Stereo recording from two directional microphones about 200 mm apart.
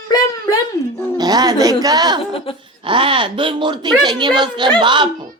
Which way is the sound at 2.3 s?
25° left (ahead or behind).